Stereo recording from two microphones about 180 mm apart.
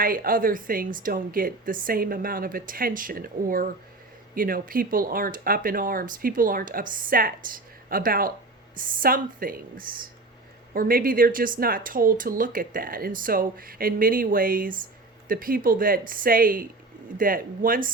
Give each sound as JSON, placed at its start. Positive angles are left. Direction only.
{"t": 0.0, "sound": "speech", "side_deg": -50}